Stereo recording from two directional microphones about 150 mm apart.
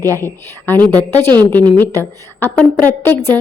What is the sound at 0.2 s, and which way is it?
A woman's voice, 15° left (ahead or behind).